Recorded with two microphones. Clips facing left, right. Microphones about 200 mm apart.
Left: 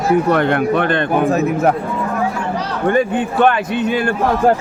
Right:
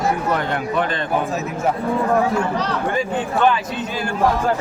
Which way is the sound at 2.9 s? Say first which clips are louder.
Left 6 dB; 60° left (ahead or behind).